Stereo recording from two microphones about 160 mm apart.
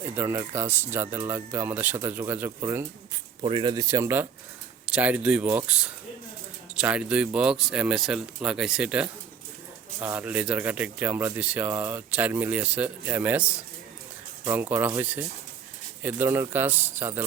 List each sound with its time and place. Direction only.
0.0 s speech: 15° right (ahead or behind)
3.4 s speech: 30° right (ahead or behind); by 13.4 s 10° right (ahead or behind)
14.4 s speech: 10° right (ahead or behind)
16.0 s speech: 15° right (ahead or behind)